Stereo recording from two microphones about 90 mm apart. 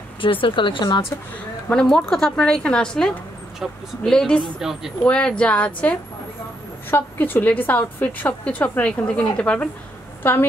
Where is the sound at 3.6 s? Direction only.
5° right (ahead or behind).